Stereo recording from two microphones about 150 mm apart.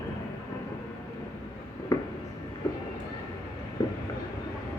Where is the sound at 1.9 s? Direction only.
25° left (ahead or behind).